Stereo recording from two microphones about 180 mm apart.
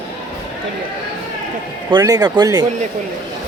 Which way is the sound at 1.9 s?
20° right (ahead or behind).